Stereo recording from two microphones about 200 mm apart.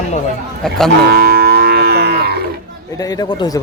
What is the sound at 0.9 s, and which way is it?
Livestock, 55° right (ahead or behind).